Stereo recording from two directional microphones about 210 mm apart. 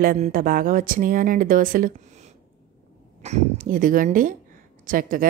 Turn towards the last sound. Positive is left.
turn(degrees=-40)  # may be behind; listen again after turning